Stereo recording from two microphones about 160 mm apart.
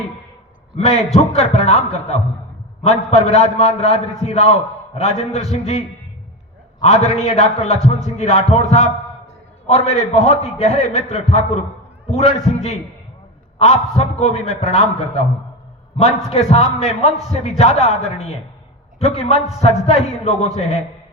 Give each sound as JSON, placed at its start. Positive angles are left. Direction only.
{"t": 0.9, "sound": "a man's voice", "side_deg": 40}
{"t": 6.8, "sound": "a man's voice", "side_deg": 40}